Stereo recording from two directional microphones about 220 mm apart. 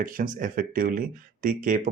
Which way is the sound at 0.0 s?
40° right (ahead or behind).